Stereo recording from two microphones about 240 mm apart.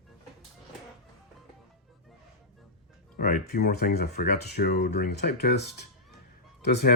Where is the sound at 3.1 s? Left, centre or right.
Left.